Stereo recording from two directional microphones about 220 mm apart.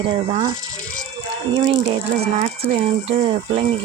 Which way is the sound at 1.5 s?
20° right (ahead or behind).